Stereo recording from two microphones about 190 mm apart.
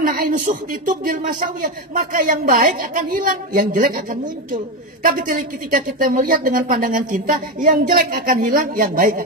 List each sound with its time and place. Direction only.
0.0 s a woman's voice: 50° right (ahead or behind)